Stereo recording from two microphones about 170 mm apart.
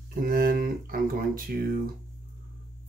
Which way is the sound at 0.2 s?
60° right (ahead or behind).